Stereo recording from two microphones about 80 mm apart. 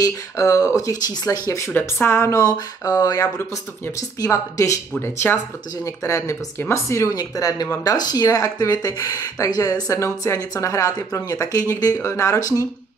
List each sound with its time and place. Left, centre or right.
0.0 s speech: left
1.7 s speech: left
5.0 s speech: left
5.9 s speech: left
9.9 s speech: left